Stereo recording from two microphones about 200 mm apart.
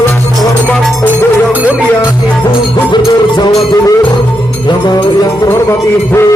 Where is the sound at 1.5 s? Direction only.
10° right (ahead or behind).